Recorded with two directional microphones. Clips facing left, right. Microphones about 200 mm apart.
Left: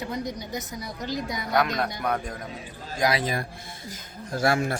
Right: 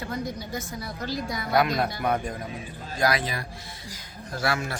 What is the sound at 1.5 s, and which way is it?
Speech, 5° right (ahead or behind).